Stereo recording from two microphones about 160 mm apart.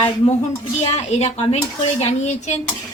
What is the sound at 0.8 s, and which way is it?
A woman's voice, 40° left (ahead or behind).